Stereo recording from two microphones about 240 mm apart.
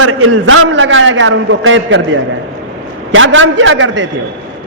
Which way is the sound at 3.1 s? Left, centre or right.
Right.